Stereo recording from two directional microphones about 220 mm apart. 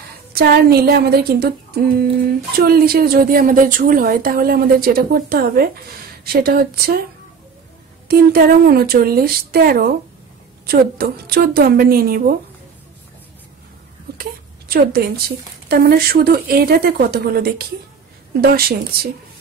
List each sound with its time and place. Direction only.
0.3 s speech: 45° right (ahead or behind)
8.1 s speech: 45° right (ahead or behind)
14.1 s a sound: 45° right (ahead or behind)
14.7 s speech: 45° right (ahead or behind)